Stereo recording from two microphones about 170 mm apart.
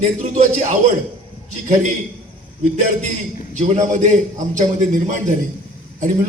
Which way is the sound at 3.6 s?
45° right (ahead or behind).